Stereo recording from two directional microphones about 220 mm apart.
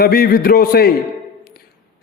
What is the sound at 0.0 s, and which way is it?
Speech, 45° left (ahead or behind).